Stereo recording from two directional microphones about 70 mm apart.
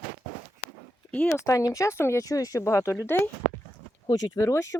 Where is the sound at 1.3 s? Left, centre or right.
Left.